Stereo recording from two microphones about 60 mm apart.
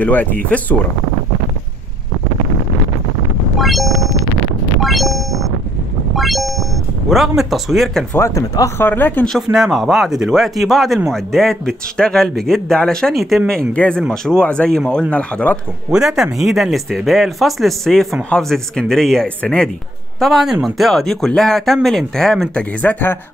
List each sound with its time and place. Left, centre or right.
0.0 s speech: left
3.5 s a sound: centre
7.1 s speech: centre
8.2 s speech: left
8.7 s speech: left
9.5 s a man's voice: centre
13.7 s a man's voice: centre
15.9 s a man's voice: centre
20.2 s a man's voice: centre
22.5 s speech: left